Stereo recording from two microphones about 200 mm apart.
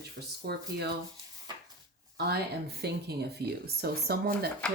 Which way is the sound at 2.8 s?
55° right (ahead or behind).